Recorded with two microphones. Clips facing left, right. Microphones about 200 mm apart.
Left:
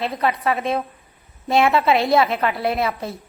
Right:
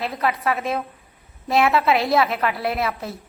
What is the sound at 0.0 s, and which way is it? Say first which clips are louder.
A woman's voice: left 2 dB; centre (ahead or behind).